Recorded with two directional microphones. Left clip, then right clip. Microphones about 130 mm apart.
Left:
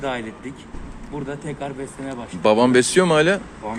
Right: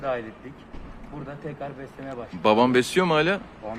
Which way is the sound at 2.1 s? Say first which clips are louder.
Left 3 dB; 15° right (ahead or behind).